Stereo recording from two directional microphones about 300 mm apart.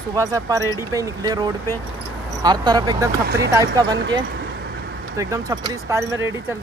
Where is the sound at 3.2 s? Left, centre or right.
Right.